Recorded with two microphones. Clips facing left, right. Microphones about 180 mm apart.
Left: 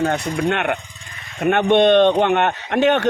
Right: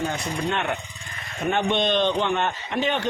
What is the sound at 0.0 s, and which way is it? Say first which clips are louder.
A man's voice: left 7 dB; 70° left (ahead or behind).